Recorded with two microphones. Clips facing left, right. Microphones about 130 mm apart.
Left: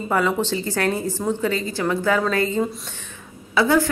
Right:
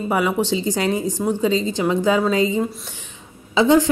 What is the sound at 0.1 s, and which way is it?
A woman's voice, 15° right (ahead or behind).